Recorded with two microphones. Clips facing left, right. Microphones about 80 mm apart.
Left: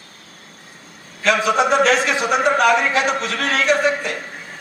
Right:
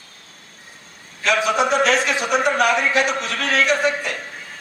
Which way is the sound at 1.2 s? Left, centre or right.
Left.